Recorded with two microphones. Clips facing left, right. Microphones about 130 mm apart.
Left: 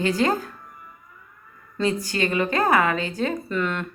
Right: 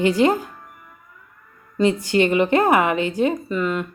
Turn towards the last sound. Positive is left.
turn(degrees=-5)  # may be behind; listen again after turning